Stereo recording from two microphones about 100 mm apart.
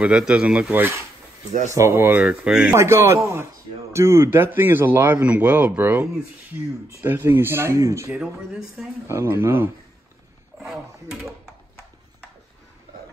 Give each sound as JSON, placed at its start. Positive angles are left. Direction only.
{"t": 0.0, "sound": "a man's voice", "side_deg": -5}
{"t": 2.1, "sound": "speech", "side_deg": -10}
{"t": 2.7, "sound": "a man's voice", "side_deg": -25}
{"t": 8.2, "sound": "speech", "side_deg": -5}
{"t": 9.0, "sound": "a man's voice", "side_deg": -25}